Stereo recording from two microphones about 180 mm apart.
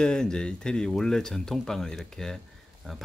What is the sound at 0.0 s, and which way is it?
Speech, 5° left (ahead or behind).